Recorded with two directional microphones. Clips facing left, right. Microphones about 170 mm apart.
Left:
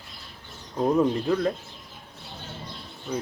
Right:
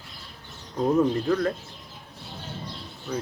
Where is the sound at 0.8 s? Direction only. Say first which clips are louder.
Even; 15° left (ahead or behind).